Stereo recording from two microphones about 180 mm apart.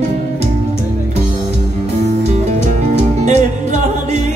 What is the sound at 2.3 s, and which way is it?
Music, 40° right (ahead or behind).